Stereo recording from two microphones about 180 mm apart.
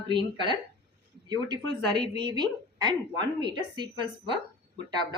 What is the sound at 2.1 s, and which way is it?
A woman's voice, 25° right (ahead or behind).